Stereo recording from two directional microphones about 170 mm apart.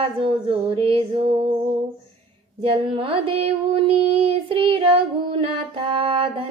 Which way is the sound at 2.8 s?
30° right (ahead or behind).